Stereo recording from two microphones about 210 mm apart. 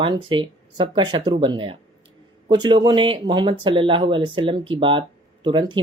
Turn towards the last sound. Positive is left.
turn(degrees=-20)  # may be behind; listen again after turning